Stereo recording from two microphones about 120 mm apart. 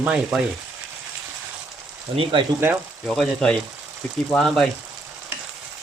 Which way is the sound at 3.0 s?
Centre (ahead or behind).